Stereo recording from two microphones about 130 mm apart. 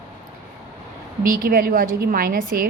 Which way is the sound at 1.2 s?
90° right.